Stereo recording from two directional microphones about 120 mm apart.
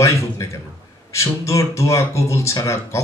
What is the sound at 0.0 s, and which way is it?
A man's voice, 25° left (ahead or behind).